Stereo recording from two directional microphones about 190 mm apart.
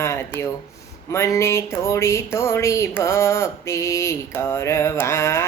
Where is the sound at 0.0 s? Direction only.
15° left (ahead or behind).